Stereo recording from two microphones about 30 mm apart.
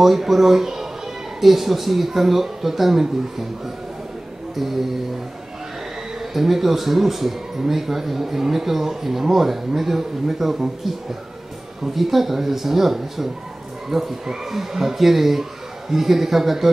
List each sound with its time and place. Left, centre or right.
0.0 s a man's voice: centre
4.6 s a man's voice: centre
6.3 s a man's voice: centre